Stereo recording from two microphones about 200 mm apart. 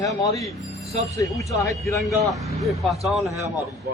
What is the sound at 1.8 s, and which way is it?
A man's voice, centre (ahead or behind).